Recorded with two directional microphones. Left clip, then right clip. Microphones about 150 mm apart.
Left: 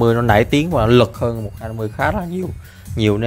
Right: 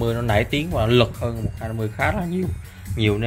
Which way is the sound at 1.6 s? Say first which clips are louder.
Right 1 dB; 35° left (ahead or behind).